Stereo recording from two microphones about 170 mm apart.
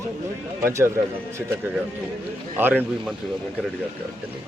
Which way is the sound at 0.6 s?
15° right (ahead or behind).